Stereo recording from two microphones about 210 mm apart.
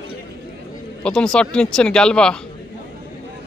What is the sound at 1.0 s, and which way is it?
A man's voice, 5° left (ahead or behind).